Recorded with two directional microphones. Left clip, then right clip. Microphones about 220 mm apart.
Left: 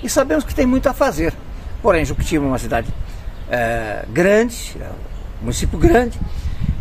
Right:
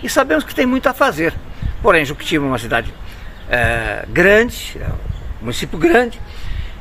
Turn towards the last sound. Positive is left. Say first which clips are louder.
# right 2 dB
turn(degrees=0)  # may be behind; listen again after turning